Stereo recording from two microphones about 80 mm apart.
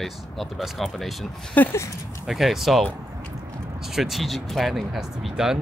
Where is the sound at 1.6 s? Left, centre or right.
Centre.